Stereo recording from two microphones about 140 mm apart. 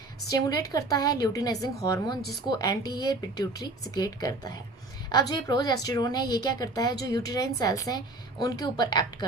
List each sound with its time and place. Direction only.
0.3 s a woman's voice: 25° left (ahead or behind)